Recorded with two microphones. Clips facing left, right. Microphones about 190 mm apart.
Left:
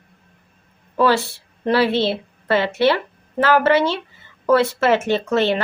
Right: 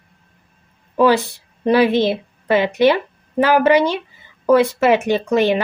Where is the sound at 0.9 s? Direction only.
15° right (ahead or behind).